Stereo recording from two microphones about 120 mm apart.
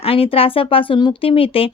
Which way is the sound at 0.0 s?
50° left (ahead or behind).